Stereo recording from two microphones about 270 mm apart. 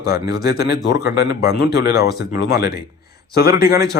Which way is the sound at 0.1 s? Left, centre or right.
Left.